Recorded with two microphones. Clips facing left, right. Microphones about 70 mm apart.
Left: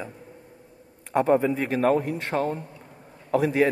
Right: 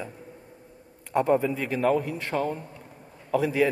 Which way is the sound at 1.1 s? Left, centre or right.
Left.